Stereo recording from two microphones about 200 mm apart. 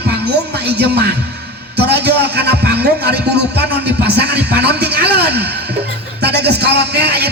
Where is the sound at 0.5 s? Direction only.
55° right (ahead or behind).